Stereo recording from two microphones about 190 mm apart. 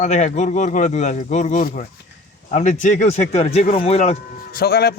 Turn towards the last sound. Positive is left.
turn(degrees=55)  # may be behind; listen again after turning